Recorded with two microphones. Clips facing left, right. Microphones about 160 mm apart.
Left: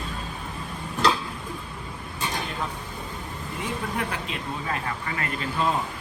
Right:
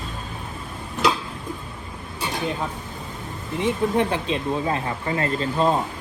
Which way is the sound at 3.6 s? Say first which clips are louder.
Right 9 dB; 30° right (ahead or behind).